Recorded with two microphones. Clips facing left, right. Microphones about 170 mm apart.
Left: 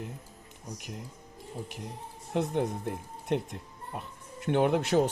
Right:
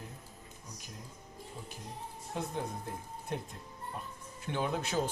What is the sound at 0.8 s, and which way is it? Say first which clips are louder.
Speech: left 8 dB; 70° left (ahead or behind).